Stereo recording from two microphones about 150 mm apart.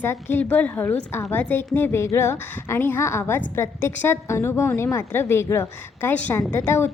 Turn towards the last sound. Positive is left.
turn(degrees=15)  # may be behind; listen again after turning